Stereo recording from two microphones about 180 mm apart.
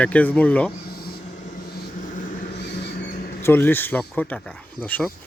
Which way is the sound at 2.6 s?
70° left (ahead or behind).